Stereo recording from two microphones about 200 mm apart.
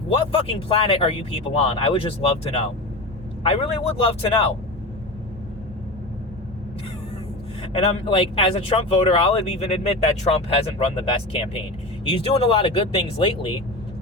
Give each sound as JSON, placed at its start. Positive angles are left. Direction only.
{"t": 0.3, "sound": "speech", "side_deg": 30}
{"t": 7.7, "sound": "speech", "side_deg": 30}